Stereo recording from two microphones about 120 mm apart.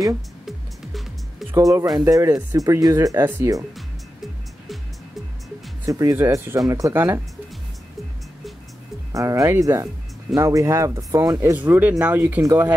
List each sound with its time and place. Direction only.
1.5 s speech: 25° right (ahead or behind)
5.9 s speech: 30° right (ahead or behind)
9.1 s speech: 25° right (ahead or behind)
11.5 s speech: 15° right (ahead or behind)